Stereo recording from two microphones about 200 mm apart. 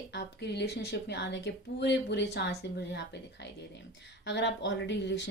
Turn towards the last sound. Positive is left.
turn(degrees=60)  # may be behind; listen again after turning